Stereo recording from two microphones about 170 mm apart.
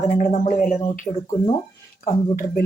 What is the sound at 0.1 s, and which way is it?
Speech, 50° left (ahead or behind).